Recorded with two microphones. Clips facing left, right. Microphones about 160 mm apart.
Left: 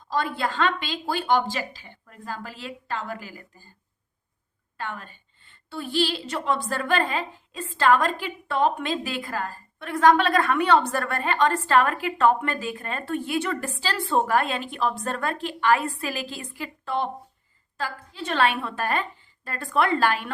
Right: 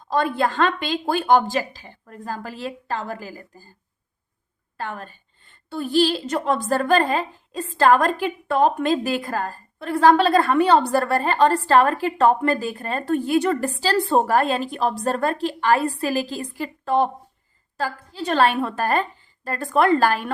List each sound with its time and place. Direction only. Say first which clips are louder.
0.1 s a woman's voice: right 5 dB; 50° right (ahead or behind)
4.8 s a woman's voice: right 3 dB; 40° right (ahead or behind)